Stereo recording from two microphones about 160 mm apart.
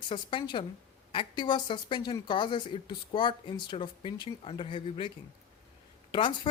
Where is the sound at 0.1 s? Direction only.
30° left (ahead or behind).